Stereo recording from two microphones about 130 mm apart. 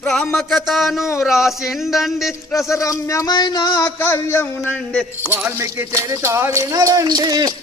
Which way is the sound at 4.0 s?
20° left (ahead or behind).